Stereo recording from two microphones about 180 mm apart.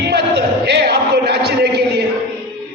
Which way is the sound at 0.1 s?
65° right (ahead or behind).